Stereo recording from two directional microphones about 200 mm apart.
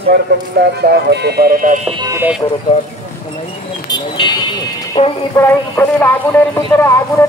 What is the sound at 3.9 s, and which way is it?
Vehicle, 20° left (ahead or behind).